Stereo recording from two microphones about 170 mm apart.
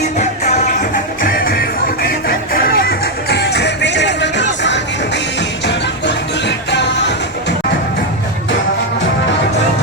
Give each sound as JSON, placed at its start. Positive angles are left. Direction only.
{"t": 0.2, "sound": "music", "side_deg": 40}
{"t": 1.4, "sound": "music", "side_deg": 65}
{"t": 6.7, "sound": "music", "side_deg": 90}